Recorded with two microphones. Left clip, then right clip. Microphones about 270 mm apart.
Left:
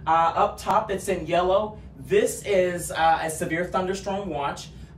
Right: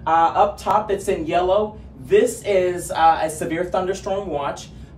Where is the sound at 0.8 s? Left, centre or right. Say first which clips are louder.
Right 5 dB; centre.